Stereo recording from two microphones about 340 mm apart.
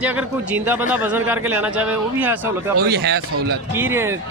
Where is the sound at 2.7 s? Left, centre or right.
Right.